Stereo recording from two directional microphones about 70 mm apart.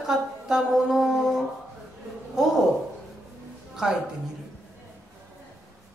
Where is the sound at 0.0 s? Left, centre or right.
Centre.